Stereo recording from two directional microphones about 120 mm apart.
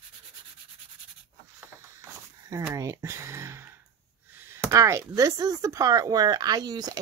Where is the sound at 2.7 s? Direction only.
25° right (ahead or behind).